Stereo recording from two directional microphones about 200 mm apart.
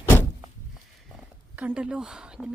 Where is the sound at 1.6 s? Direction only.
5° right (ahead or behind).